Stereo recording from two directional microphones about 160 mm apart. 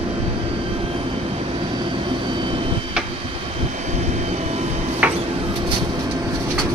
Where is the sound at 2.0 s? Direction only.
30° right (ahead or behind).